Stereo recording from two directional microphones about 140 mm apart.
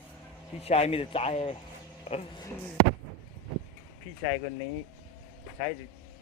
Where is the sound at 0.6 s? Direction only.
50° left (ahead or behind).